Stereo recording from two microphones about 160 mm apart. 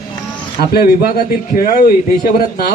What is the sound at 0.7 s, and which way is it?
A man's voice, 70° left (ahead or behind).